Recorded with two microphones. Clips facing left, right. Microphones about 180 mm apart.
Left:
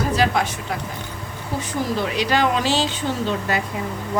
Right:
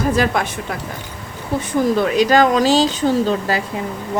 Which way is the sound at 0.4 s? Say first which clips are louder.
Right 1 dB; 55° right (ahead or behind).